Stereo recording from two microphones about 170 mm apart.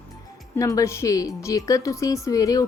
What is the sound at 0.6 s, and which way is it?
Speech, 20° left (ahead or behind).